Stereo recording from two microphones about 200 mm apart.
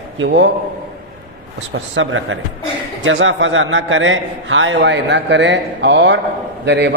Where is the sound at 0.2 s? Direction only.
60° right (ahead or behind).